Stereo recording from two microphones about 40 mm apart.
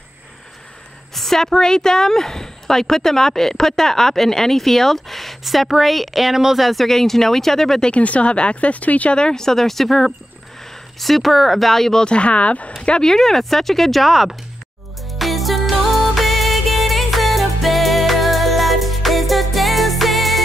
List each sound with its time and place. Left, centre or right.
1.1 s speech: centre
8.0 s speech: left
9.1 s speech: centre
12.0 s speech: left
12.8 s speech: left
13.1 s speech: centre
15.0 s music: centre